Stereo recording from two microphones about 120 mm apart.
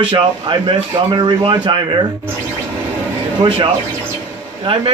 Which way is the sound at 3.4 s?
45° right (ahead or behind).